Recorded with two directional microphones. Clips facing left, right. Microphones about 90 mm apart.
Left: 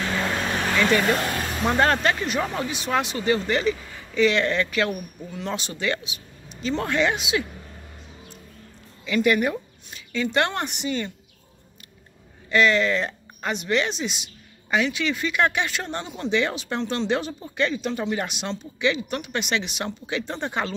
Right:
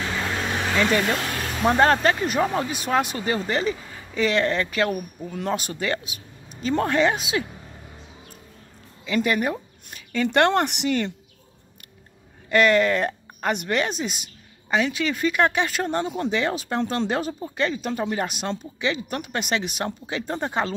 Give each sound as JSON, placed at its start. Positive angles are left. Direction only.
{"t": 0.1, "sound": "vehicle", "side_deg": 0}
{"t": 1.0, "sound": "speech", "side_deg": 0}
{"t": 2.0, "sound": "speech", "side_deg": -35}
{"t": 2.4, "sound": "speech", "side_deg": -25}
{"t": 2.7, "sound": "speech", "side_deg": -45}
{"t": 5.3, "sound": "speech", "side_deg": -45}
{"t": 9.0, "sound": "speech", "side_deg": -30}
{"t": 9.8, "sound": "speech", "side_deg": -50}
{"t": 12.4, "sound": "speech", "side_deg": -50}